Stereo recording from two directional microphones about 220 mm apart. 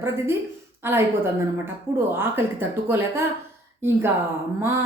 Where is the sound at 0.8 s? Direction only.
10° right (ahead or behind).